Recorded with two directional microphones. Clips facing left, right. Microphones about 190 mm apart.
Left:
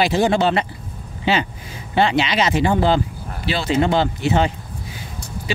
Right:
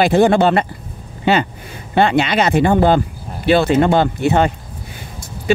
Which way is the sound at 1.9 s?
55° right (ahead or behind).